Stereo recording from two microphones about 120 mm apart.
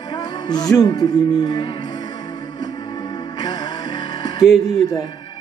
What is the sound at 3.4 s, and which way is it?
Music, 35° left (ahead or behind).